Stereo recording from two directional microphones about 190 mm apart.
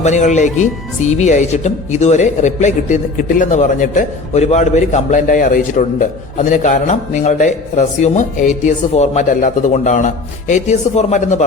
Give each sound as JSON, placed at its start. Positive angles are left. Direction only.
{"t": 0.0, "sound": "speech", "side_deg": 40}